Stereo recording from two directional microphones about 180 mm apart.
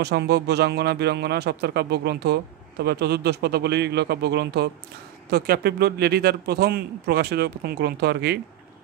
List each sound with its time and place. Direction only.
0.0 s a man's voice: 65° right (ahead or behind)